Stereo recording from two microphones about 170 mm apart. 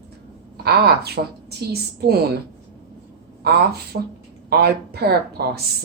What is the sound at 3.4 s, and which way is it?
A woman's voice, 70° right (ahead or behind).